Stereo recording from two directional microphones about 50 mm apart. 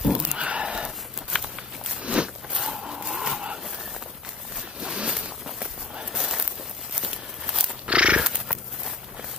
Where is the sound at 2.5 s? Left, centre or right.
Centre.